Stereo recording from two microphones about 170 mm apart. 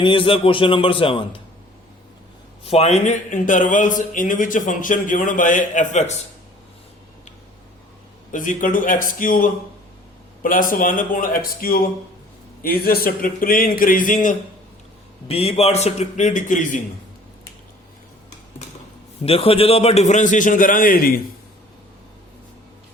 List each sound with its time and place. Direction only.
0.0 s a man's voice: 30° left (ahead or behind)
2.6 s speech: 35° left (ahead or behind)
8.3 s a man's voice: 50° left (ahead or behind)
15.3 s a man's voice: 35° left (ahead or behind)
19.2 s speech: 35° left (ahead or behind); by 21.2 s 60° left (ahead or behind)